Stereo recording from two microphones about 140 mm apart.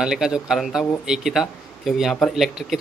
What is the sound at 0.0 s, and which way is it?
Speech, 5° right (ahead or behind).